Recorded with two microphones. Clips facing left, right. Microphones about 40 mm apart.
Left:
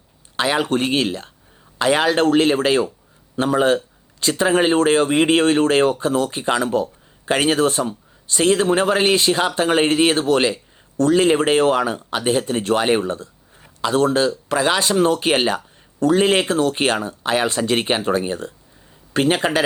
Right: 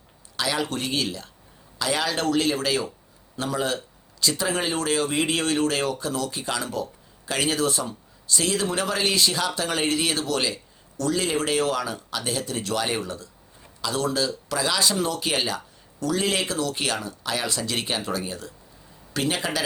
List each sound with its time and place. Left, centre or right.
0.3 s a man's voice: left